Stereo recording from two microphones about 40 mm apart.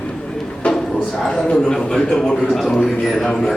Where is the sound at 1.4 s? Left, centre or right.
Left.